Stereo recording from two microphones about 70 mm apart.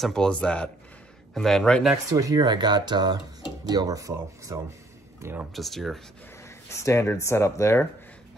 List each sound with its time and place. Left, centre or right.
0.0 s speech: centre
1.3 s a man's voice: centre
2.3 s speech: right
3.6 s speech: right
5.5 s a man's voice: centre
6.7 s speech: left